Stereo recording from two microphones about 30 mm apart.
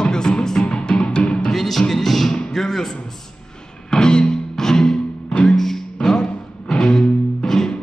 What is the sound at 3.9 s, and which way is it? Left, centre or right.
Music, left.